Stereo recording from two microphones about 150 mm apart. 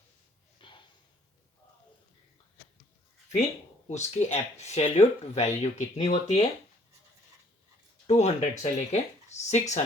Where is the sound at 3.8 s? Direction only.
50° left (ahead or behind).